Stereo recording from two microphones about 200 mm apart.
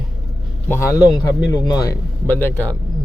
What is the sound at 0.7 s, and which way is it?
A man's voice, 15° left (ahead or behind).